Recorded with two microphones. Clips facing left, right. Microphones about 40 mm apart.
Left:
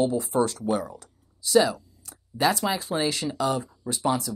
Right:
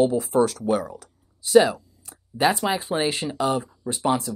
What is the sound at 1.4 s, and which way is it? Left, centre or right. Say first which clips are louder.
Speech: right 4 dB; right.